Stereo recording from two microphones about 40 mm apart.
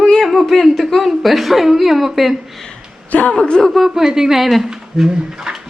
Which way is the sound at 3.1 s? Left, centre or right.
Left.